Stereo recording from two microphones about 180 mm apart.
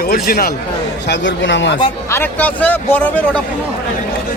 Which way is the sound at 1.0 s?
80° left.